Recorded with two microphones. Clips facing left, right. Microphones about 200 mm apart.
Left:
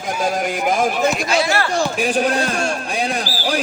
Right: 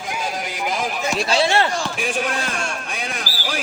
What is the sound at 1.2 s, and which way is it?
Speech, 30° right (ahead or behind).